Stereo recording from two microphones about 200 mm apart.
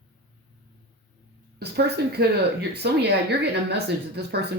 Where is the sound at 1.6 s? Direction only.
55° right (ahead or behind).